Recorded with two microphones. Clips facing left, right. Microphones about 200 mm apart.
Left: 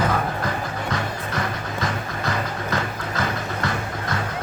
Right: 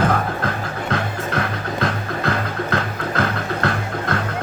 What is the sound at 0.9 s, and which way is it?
Music, 60° right (ahead or behind).